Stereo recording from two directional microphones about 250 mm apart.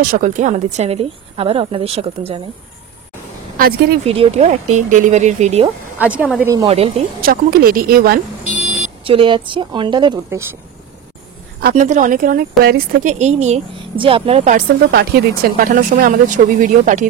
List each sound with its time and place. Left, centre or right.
0.0 s speech: right
4.0 s speech: right
5.9 s speech: centre; by 8.2 s right
9.0 s speech: right
11.6 s speech: right
14.9 s speech: right